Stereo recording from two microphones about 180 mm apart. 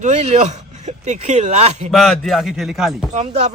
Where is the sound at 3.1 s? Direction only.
40° right (ahead or behind).